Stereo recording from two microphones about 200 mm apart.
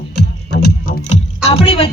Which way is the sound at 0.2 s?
55° left (ahead or behind).